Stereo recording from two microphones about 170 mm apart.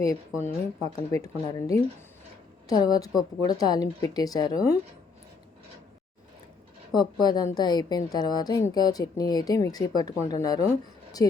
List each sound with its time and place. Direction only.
0.0 s a woman's voice: 20° left (ahead or behind)
6.9 s a woman's voice: 25° left (ahead or behind)